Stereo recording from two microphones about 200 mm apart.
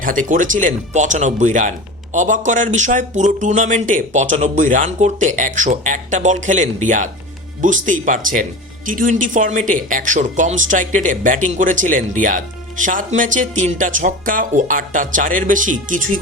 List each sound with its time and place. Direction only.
0.0 s speech: 40° right (ahead or behind)